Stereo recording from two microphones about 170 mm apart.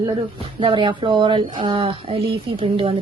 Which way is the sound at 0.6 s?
30° right (ahead or behind).